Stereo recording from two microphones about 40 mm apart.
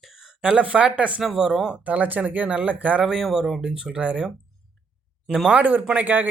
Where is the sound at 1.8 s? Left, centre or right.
Right.